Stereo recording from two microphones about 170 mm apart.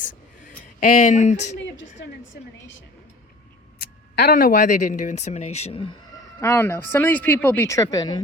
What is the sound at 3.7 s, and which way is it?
Speech, 60° left (ahead or behind).